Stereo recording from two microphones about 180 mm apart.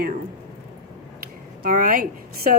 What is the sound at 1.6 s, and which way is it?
Speech, 50° right (ahead or behind).